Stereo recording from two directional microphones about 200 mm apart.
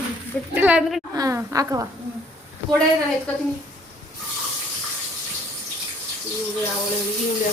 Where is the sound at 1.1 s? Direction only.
15° right (ahead or behind).